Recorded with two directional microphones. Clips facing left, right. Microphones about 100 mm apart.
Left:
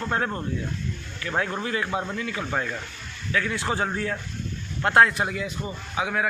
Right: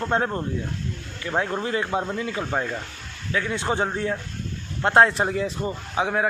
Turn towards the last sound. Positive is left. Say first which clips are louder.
# right 3 dB
turn(degrees=-30)  # may be behind; listen again after turning